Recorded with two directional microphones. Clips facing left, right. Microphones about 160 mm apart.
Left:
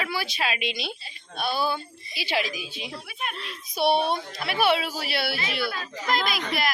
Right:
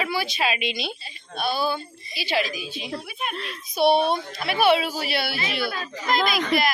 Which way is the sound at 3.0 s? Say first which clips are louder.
Right 3 dB; 15° right (ahead or behind).